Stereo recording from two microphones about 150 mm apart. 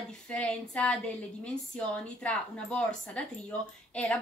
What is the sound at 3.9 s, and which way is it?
Child singing, 5° left (ahead or behind).